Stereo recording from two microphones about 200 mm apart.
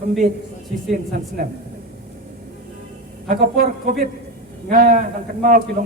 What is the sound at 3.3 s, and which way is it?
A man's voice, 45° right (ahead or behind).